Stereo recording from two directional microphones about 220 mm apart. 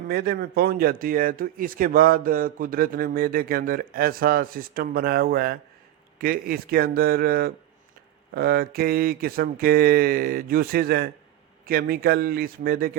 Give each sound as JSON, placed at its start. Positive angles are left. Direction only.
{"t": 0.1, "sound": "speech", "side_deg": -45}